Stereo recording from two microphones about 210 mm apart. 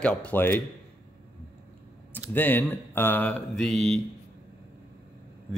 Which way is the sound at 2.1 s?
10° left (ahead or behind).